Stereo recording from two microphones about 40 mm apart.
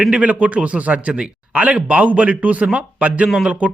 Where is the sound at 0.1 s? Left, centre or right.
Right.